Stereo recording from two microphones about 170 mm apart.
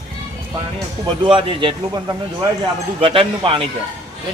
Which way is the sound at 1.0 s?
30° right (ahead or behind).